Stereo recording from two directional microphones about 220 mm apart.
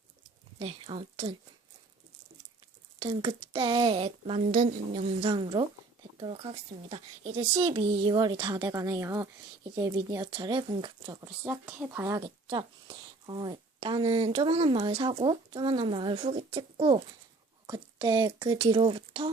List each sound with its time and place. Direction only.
0.6 s speech: 25° right (ahead or behind)
3.0 s speech: 20° right (ahead or behind)
11.3 s speech: 5° right (ahead or behind); by 19.3 s 20° right (ahead or behind)